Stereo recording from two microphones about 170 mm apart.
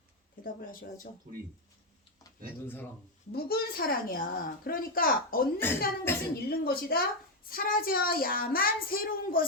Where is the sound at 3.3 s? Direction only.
65° left (ahead or behind).